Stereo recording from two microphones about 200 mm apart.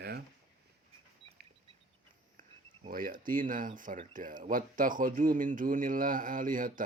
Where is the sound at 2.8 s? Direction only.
45° right (ahead or behind).